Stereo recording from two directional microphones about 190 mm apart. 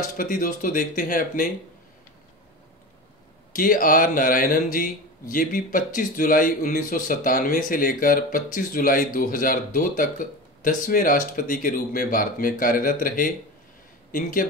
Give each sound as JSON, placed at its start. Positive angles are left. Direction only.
{"t": 0.2, "sound": "speech", "side_deg": 45}
{"t": 3.5, "sound": "speech", "side_deg": 45}